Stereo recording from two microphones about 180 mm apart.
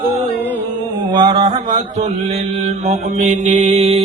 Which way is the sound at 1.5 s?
45° right (ahead or behind).